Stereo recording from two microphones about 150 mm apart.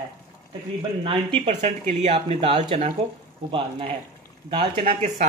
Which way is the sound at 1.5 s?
50° right (ahead or behind).